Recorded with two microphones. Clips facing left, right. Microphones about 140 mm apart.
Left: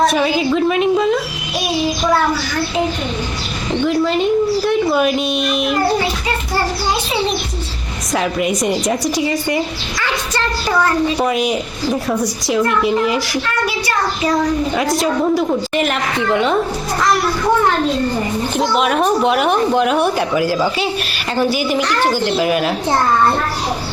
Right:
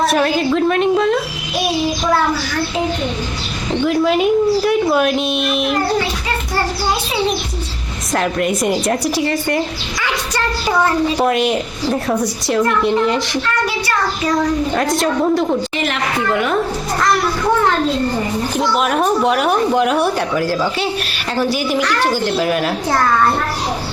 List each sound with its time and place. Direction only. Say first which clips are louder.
0.0 s a woman's voice: even; centre (ahead or behind)
3.8 s a woman's voice: right 1 dB; 5° right (ahead or behind)
8.1 s a woman's voice: even; centre (ahead or behind)
10.0 s speech: even; 15° right (ahead or behind)
11.2 s a woman's voice: right 1 dB; centre (ahead or behind)
14.8 s a woman's voice: even; centre (ahead or behind)
16.1 s a woman's voice: left 2 dB; 20° left (ahead or behind)
18.8 s a woman's voice: left 1 dB; centre (ahead or behind)